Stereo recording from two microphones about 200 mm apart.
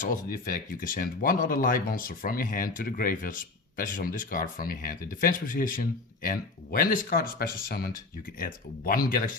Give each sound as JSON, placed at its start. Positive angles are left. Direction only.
{"t": 0.3, "sound": "speech", "side_deg": 45}